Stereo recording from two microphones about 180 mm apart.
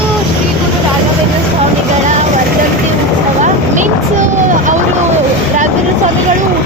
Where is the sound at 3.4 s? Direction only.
45° right (ahead or behind).